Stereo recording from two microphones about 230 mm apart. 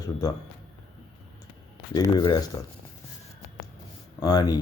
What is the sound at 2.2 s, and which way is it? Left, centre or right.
Speech, centre.